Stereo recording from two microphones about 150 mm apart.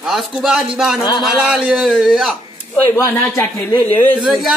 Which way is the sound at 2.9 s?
15° left (ahead or behind).